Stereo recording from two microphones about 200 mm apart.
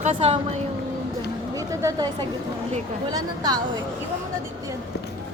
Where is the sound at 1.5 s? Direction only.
15° right (ahead or behind).